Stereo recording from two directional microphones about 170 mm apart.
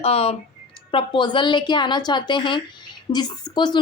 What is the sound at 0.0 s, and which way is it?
A woman's voice, 35° left (ahead or behind).